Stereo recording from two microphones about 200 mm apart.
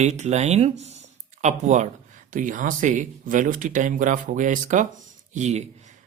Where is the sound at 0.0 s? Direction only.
35° right (ahead or behind).